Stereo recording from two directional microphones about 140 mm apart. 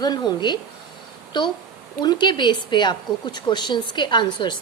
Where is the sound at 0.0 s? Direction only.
30° left (ahead or behind).